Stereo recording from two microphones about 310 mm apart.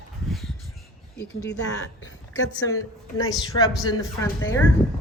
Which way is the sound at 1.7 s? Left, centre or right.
Left.